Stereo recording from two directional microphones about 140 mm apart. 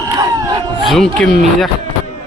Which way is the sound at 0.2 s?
25° right (ahead or behind).